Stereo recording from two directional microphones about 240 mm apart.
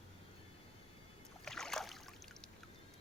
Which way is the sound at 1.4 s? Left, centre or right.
Centre.